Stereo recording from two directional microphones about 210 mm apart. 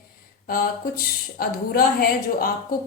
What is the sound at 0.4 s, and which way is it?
A woman's voice, 45° left (ahead or behind).